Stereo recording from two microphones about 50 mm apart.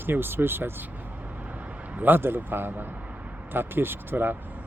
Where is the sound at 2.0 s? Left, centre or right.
Right.